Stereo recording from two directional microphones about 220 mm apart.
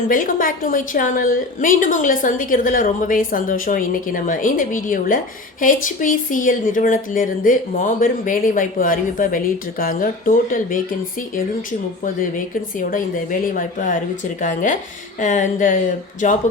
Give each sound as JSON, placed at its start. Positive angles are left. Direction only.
{"t": 0.1, "sound": "a woman's voice", "side_deg": 40}
{"t": 13.5, "sound": "a woman's voice", "side_deg": 35}